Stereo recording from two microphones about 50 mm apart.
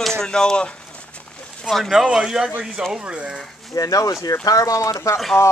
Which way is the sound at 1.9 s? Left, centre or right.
Centre.